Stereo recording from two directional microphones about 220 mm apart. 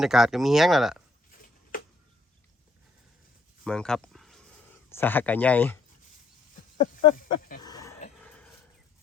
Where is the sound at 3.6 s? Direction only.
5° left (ahead or behind).